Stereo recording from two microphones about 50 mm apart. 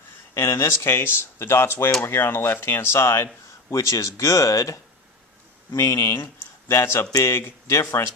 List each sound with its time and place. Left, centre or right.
0.3 s speech: left
3.7 s speech: left
5.7 s speech: left
6.7 s speech: left